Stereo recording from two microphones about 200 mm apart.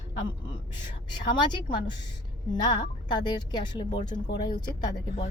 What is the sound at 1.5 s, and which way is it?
A woman's voice, 25° left (ahead or behind).